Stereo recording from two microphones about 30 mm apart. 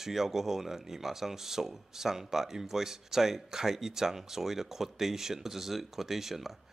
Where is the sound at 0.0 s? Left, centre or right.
Centre.